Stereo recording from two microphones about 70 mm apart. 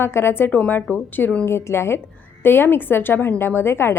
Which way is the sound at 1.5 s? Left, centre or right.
Left.